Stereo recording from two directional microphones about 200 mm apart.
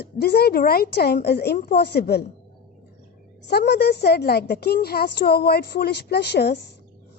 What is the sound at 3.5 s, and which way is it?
A woman's voice, 55° left (ahead or behind).